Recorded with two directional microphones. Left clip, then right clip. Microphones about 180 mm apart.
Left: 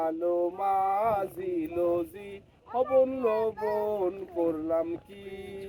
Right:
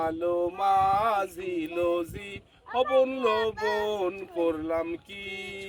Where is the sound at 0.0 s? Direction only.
35° right (ahead or behind).